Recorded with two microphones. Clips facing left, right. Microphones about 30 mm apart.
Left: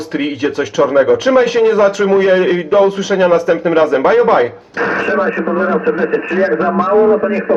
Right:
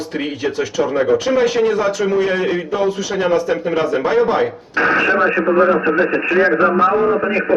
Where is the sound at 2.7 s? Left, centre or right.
Left.